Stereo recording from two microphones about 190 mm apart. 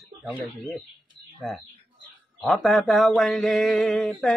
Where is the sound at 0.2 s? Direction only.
5° right (ahead or behind).